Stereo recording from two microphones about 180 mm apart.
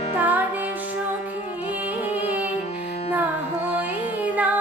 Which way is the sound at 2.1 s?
10° right (ahead or behind).